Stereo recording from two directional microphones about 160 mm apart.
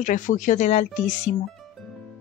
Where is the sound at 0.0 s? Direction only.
55° left (ahead or behind).